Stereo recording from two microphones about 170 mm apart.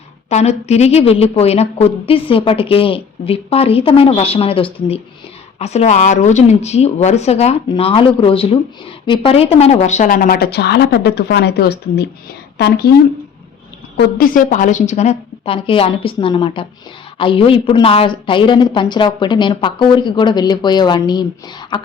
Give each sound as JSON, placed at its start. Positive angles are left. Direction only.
{"t": 0.3, "sound": "speech", "side_deg": 40}
{"t": 13.9, "sound": "a woman's voice", "side_deg": 60}